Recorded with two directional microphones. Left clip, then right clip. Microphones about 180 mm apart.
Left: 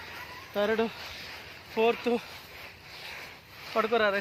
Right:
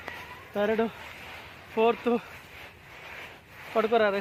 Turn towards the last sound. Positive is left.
turn(degrees=-55)  # may be behind; listen again after turning